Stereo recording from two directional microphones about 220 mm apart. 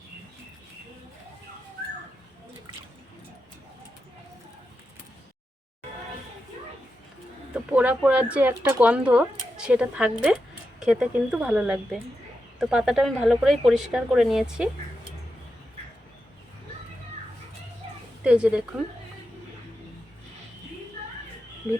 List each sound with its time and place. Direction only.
7.5 s speech: 5° right (ahead or behind)
18.2 s a woman's voice: 5° right (ahead or behind)